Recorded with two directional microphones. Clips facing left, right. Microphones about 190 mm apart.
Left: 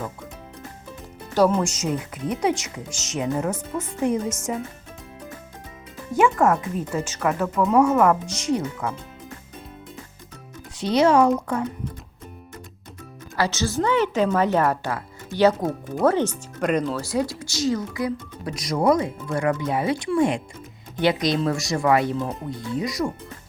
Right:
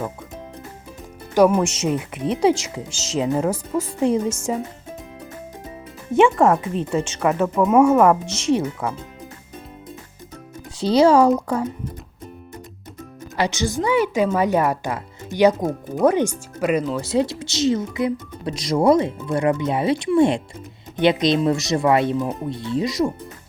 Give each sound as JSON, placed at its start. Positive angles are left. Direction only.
{"t": 1.4, "sound": "a woman's voice", "side_deg": -10}
{"t": 1.6, "sound": "speech", "side_deg": -25}
{"t": 6.1, "sound": "speech", "side_deg": -25}
{"t": 10.8, "sound": "speech", "side_deg": -30}
{"t": 13.3, "sound": "a woman's voice", "side_deg": -20}
{"t": 17.0, "sound": "speech", "side_deg": -25}